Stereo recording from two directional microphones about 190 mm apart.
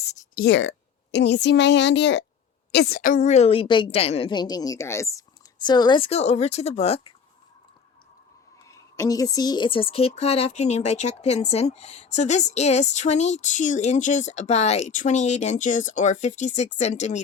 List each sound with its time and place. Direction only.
0.3 s a woman's voice: 65° left (ahead or behind)
2.7 s speech: 55° left (ahead or behind); by 7.1 s 30° left (ahead or behind)
8.7 s speech: 15° left (ahead or behind); by 17.2 s 40° left (ahead or behind)